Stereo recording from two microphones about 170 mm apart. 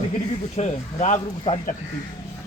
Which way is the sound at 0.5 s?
40° left (ahead or behind).